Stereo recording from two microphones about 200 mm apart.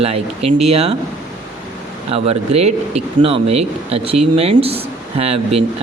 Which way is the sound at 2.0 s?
30° right (ahead or behind).